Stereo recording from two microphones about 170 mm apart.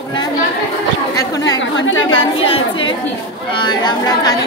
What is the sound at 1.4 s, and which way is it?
Speech, 90° left.